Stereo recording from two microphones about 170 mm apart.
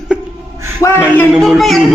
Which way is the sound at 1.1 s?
Centre (ahead or behind).